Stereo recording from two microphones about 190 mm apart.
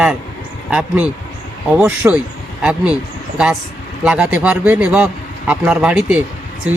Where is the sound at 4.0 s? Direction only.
5° right (ahead or behind).